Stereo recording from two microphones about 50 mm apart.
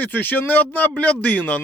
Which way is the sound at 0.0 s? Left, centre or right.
Left.